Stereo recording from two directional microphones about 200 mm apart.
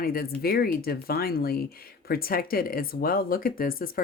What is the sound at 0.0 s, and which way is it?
Speech, 45° left (ahead or behind).